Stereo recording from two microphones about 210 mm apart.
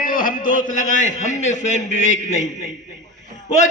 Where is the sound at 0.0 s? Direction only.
40° left (ahead or behind).